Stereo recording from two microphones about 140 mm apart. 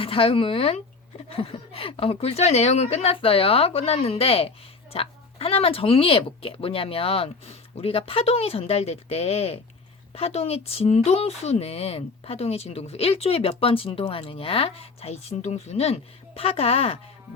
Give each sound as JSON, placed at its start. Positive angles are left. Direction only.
{"t": 0.0, "sound": "a woman's voice", "side_deg": 40}